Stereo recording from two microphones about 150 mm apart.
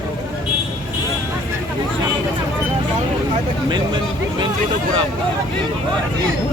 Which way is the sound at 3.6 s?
30° right (ahead or behind).